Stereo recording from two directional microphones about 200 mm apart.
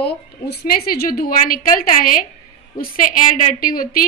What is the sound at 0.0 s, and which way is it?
A woman's voice, 55° left (ahead or behind).